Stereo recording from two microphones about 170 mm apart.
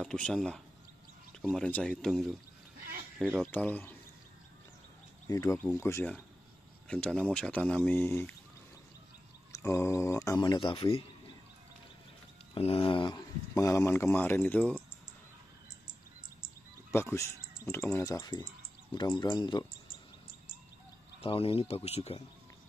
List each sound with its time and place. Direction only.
0.0 s speech: 5° left (ahead or behind)
3.5 s speech: 10° left (ahead or behind)
5.3 s speech: 20° left (ahead or behind)
6.9 s speech: 5° left (ahead or behind)
9.5 s speech: 15° left (ahead or behind)
12.5 s speech: 35° left (ahead or behind); by 14.8 s 10° left (ahead or behind)
16.9 s speech: 15° left (ahead or behind)
21.2 s speech: 35° left (ahead or behind)